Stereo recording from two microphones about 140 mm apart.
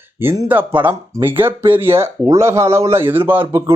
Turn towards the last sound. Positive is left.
turn(degrees=-15)  # may be behind; listen again after turning